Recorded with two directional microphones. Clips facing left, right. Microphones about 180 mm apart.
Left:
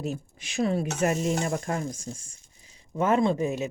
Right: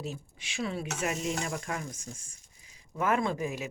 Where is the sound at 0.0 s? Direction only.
45° left (ahead or behind).